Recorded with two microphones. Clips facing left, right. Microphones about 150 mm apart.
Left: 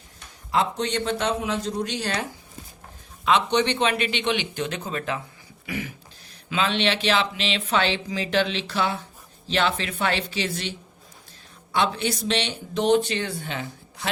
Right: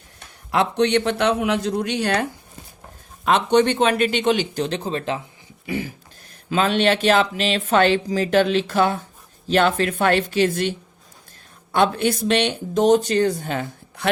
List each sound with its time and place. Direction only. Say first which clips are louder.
0.5 s a man's voice: right 6 dB; 65° right (ahead or behind)
3.2 s speech: right 4 dB; 50° right (ahead or behind); by 5.2 s 30° right (ahead or behind)
5.6 s a sound: right 5 dB; 30° right (ahead or behind)
6.5 s speech: right 5 dB; 45° right (ahead or behind)